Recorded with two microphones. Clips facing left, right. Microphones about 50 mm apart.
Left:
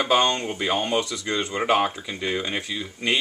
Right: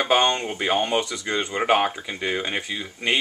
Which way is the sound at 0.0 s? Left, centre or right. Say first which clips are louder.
Right 1 dB; centre.